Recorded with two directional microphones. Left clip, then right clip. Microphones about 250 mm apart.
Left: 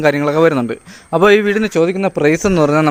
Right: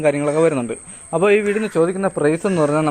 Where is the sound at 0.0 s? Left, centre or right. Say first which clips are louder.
Left 4 dB; left.